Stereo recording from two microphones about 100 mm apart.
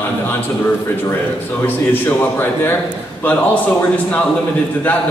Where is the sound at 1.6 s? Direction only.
20° left (ahead or behind).